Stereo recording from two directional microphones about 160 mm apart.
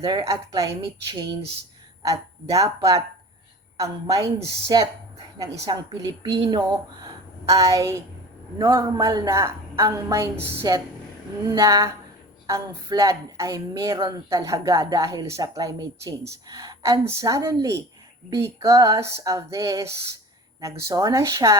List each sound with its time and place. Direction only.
0.0 s speech: 25° right (ahead or behind)
2.0 s speech: 20° right (ahead or behind)